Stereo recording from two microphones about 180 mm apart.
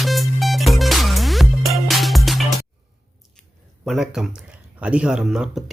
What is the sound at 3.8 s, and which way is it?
Speech, 5° right (ahead or behind).